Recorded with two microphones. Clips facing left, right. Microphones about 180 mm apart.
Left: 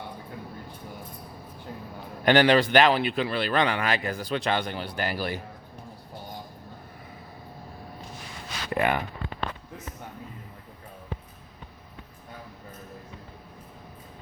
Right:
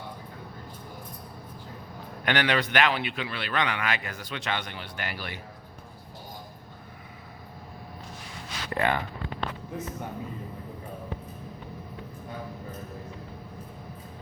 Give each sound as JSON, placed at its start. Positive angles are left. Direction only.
{"t": 2.2, "sound": "a man's voice", "side_deg": 35}
{"t": 8.7, "sound": "speech", "side_deg": 15}